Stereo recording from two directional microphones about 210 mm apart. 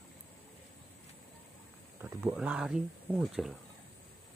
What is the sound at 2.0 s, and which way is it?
Speech, 10° right (ahead or behind).